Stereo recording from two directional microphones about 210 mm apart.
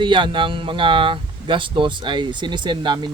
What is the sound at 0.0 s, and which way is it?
Speech, 25° right (ahead or behind).